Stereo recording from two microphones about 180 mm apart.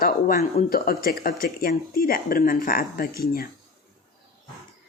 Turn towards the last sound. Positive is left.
turn(degrees=55)  # may be behind; listen again after turning